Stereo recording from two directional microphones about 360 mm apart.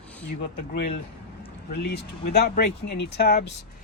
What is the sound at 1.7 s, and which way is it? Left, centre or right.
Speech, left.